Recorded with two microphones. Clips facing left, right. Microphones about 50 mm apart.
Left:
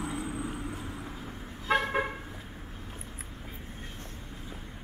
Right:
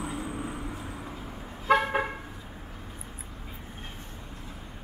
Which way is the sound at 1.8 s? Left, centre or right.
Centre.